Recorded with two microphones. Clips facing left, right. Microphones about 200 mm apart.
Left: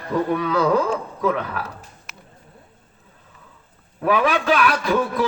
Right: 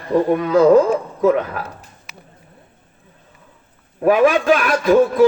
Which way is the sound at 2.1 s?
Centre (ahead or behind).